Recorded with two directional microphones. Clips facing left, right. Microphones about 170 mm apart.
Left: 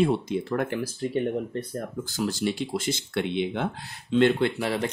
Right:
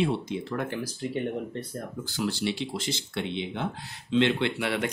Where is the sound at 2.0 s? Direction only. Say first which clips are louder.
Left 1 dB; 45° left (ahead or behind).